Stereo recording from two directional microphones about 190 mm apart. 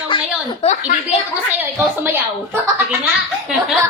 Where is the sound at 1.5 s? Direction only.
10° right (ahead or behind).